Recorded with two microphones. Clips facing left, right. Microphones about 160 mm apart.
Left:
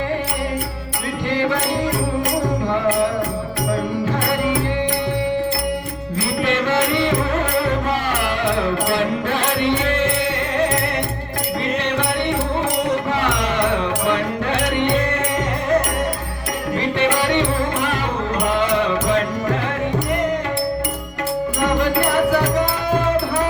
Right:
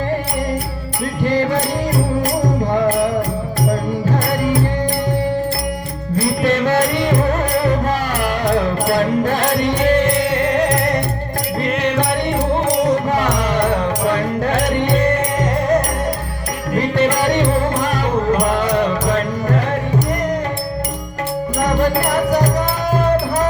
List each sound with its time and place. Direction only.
6.1 s music: 40° right (ahead or behind)
8.9 s music: 40° right (ahead or behind)
17.0 s music: 40° right (ahead or behind)